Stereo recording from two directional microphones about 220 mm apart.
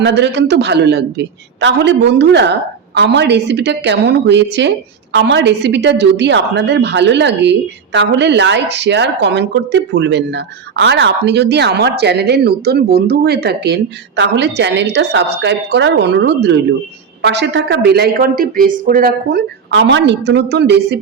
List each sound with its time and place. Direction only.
0.0 s speech: 50° right (ahead or behind)